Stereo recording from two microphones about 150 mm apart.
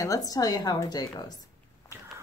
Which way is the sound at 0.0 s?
25° left (ahead or behind).